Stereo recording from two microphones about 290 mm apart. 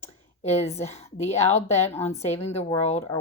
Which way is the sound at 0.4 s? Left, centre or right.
Left.